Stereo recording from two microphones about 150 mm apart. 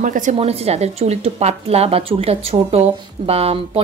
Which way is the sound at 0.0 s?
60° right (ahead or behind).